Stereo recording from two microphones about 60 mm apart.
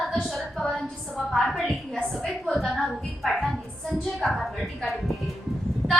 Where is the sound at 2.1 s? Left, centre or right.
Centre.